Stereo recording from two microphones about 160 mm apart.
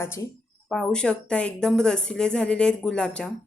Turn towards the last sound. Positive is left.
turn(degrees=5)  # may be behind; listen again after turning